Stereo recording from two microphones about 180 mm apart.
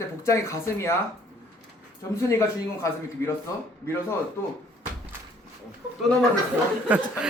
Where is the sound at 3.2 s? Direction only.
15° left (ahead or behind).